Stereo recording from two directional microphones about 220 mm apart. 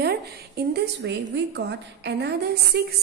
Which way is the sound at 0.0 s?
45° right (ahead or behind).